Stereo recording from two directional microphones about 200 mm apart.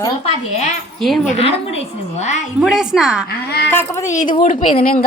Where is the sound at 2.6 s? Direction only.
5° right (ahead or behind).